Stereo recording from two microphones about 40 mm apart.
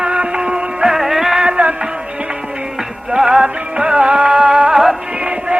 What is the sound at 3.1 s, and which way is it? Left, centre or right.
Music, centre.